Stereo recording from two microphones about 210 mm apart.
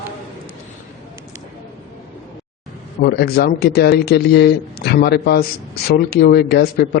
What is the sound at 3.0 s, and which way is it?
Speech, 50° left (ahead or behind).